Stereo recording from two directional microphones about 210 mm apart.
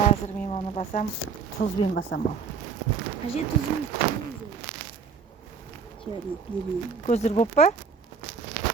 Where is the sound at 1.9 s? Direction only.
50° left (ahead or behind).